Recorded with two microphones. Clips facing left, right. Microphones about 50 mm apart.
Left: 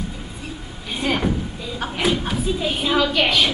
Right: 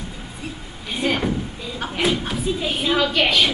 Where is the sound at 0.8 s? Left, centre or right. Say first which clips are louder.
Even; centre.